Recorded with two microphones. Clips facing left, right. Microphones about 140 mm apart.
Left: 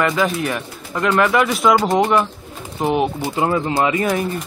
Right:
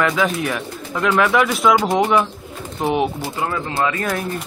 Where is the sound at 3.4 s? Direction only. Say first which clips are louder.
Left 4 dB; 25° left (ahead or behind).